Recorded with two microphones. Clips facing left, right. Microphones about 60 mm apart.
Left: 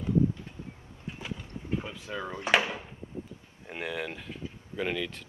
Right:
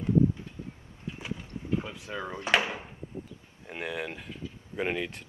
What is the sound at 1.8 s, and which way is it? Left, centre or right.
Speech, centre.